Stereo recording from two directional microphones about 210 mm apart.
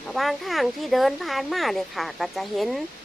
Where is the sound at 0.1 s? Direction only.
Centre (ahead or behind).